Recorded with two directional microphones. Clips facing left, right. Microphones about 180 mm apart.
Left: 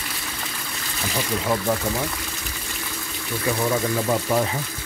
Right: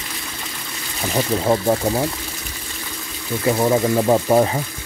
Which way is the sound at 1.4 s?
30° right (ahead or behind).